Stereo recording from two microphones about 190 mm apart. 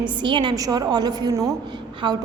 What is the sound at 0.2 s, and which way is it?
A woman's voice, 25° right (ahead or behind).